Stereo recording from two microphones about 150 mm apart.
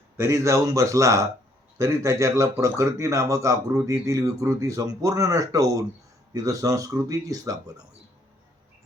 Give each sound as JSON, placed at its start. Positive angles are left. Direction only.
{"t": 0.2, "sound": "speech", "side_deg": -20}